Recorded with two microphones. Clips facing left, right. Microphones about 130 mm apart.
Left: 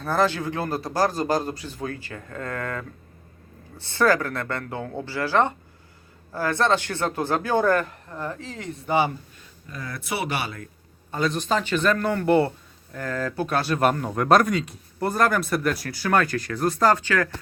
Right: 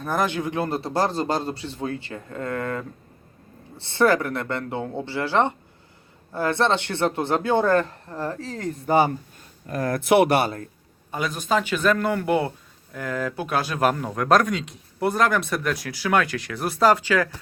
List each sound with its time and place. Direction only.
0.0 s a man's voice: 15° right (ahead or behind); by 10.5 s 55° right (ahead or behind)
11.1 s speech: 5° right (ahead or behind)